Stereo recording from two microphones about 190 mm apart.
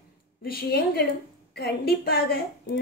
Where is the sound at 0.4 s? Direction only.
55° left (ahead or behind).